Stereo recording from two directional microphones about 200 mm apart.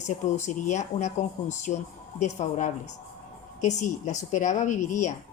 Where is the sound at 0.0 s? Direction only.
35° left (ahead or behind).